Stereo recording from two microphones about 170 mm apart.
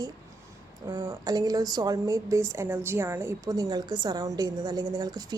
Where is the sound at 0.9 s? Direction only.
20° right (ahead or behind).